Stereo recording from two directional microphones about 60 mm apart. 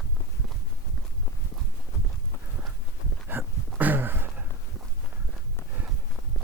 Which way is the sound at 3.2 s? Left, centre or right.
Right.